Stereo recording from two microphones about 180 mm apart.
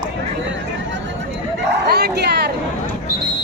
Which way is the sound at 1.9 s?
65° right (ahead or behind).